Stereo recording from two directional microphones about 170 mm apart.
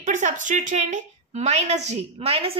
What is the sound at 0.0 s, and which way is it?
A woman's voice, 45° right (ahead or behind).